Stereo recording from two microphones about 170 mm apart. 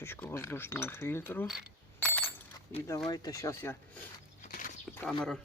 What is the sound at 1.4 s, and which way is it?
Speech, 5° right (ahead or behind).